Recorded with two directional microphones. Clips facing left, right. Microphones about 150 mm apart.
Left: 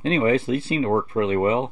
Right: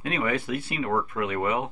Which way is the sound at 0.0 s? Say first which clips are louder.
Left 8 dB; 25° left (ahead or behind).